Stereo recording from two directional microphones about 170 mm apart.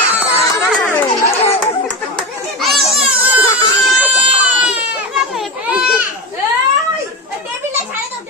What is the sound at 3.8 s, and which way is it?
Baby cry, 5° right (ahead or behind).